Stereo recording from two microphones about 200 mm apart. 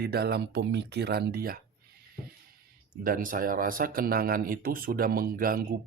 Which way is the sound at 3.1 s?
45° right (ahead or behind).